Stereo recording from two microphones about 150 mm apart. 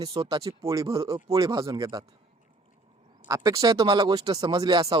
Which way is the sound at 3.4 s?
25° right (ahead or behind).